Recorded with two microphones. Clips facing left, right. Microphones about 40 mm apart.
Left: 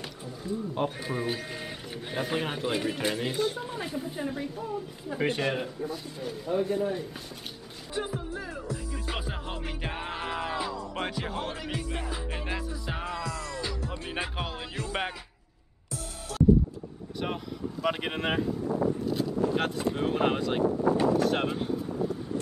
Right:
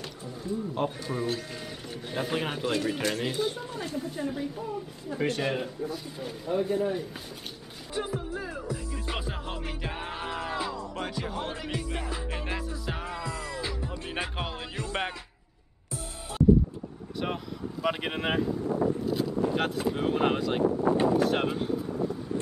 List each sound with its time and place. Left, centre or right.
0.4 s speech: centre
2.1 s speech: centre
3.7 s speech: centre
5.1 s speech: centre
5.4 s speech: centre
8.4 s music: centre
8.7 s music: centre
10.8 s music: centre
11.4 s music: centre
13.2 s music: right
14.0 s music: centre
17.2 s speech: centre
20.9 s speech: right
21.2 s a sound: centre